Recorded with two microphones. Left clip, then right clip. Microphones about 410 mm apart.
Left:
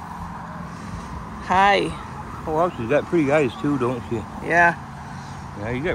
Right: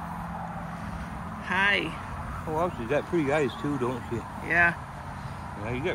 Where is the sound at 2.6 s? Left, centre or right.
Left.